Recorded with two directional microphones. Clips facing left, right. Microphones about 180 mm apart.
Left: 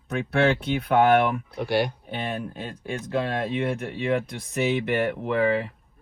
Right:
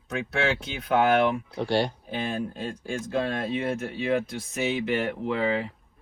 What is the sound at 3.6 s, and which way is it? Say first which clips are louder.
Speech: left 2 dB; 60° left (ahead or behind).